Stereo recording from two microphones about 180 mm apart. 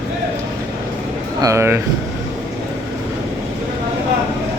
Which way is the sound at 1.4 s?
15° right (ahead or behind).